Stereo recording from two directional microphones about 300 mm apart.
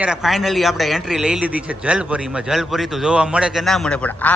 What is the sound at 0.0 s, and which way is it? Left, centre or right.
A man's voice, centre.